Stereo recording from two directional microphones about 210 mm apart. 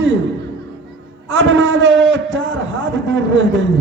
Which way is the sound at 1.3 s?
65° right (ahead or behind).